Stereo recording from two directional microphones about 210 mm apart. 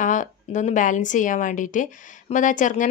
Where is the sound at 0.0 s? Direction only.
35° left (ahead or behind).